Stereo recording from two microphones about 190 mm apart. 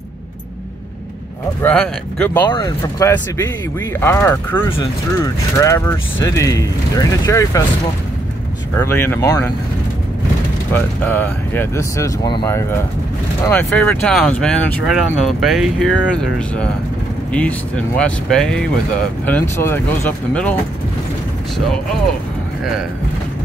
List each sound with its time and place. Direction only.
1.6 s speech: 10° left (ahead or behind)
2.5 s speech: 25° left (ahead or behind)
8.7 s speech: 10° left (ahead or behind)
10.7 s speech: 10° left (ahead or behind)